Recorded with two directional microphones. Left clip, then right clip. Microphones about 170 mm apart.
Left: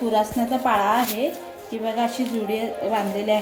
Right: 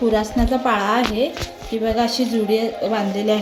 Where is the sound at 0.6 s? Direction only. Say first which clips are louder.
Even; 50° right (ahead or behind).